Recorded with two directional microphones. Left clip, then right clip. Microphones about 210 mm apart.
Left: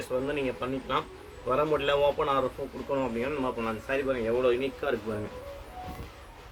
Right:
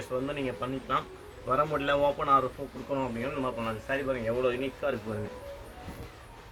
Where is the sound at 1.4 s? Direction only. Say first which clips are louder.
Left 1 dB; 35° left (ahead or behind).